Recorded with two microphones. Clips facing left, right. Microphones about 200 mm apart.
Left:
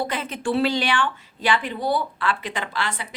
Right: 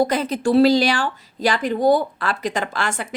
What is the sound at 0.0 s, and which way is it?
A woman's voice, 40° right (ahead or behind).